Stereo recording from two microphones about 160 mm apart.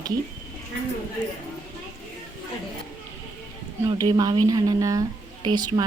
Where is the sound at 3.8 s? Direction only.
25° right (ahead or behind).